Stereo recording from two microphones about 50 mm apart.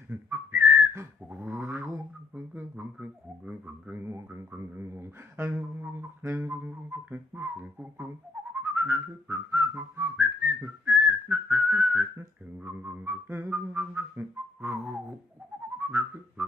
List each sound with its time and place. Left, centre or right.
0.3 s whistling: right
1.3 s a sound: right
2.7 s music: right
3.9 s a sound: right
6.4 s music: right
8.5 s whistling: right
11.0 s whistling: right
12.6 s music: right
15.8 s whistling: right